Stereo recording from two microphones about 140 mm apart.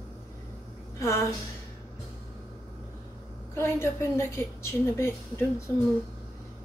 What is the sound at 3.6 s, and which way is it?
A woman's voice, 20° left (ahead or behind).